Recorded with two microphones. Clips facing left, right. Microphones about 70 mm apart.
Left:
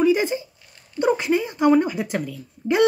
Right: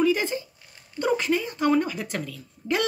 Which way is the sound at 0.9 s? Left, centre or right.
Left.